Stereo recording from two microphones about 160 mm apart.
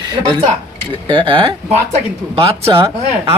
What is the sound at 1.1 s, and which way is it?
Speech, 30° right (ahead or behind).